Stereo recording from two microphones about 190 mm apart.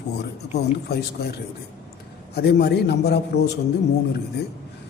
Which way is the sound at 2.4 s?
60° left (ahead or behind).